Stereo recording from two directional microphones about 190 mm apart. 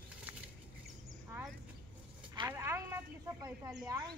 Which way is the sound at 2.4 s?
15° right (ahead or behind).